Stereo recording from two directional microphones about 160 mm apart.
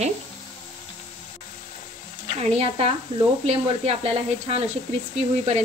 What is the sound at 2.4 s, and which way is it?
Speech, 40° right (ahead or behind).